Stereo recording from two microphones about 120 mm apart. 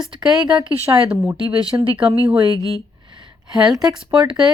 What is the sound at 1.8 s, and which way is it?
Speech, 50° right (ahead or behind).